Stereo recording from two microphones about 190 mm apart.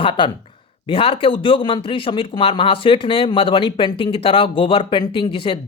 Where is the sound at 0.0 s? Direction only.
25° left (ahead or behind).